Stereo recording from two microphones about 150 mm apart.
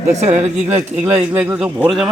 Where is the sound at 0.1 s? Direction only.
50° right (ahead or behind).